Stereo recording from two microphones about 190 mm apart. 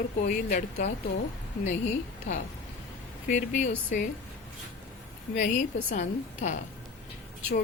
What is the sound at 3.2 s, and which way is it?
Speech, 40° left (ahead or behind).